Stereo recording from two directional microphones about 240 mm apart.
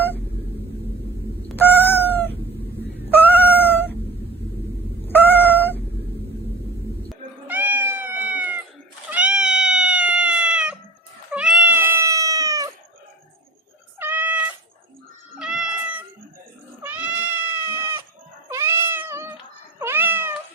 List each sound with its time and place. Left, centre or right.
1.5 s cat: centre
5.0 s cat: centre
7.1 s cat: centre
14.0 s cat: centre